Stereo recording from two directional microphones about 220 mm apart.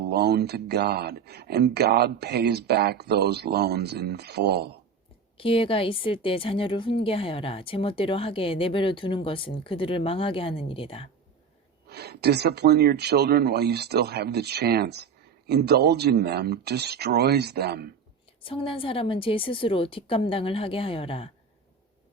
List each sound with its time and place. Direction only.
0.0 s speech: 45° right (ahead or behind)
5.4 s speech: 25° left (ahead or behind)
11.9 s speech: 45° right (ahead or behind)
18.4 s speech: 25° left (ahead or behind)